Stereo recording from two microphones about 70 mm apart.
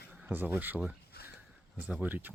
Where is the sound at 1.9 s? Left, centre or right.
Right.